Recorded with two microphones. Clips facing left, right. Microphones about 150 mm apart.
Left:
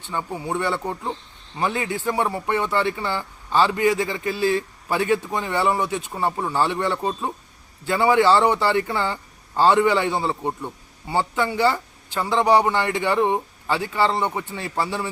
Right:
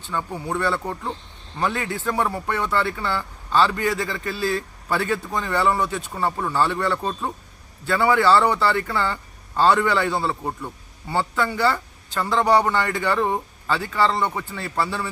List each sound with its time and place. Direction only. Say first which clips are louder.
0.3 s a man's voice: even; 10° left (ahead or behind)